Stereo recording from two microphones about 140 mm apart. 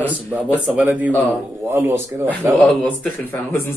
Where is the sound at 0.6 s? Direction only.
10° right (ahead or behind).